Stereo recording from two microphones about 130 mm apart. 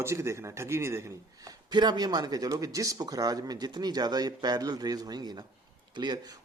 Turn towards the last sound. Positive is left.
turn(degrees=-30)  # may be behind; listen again after turning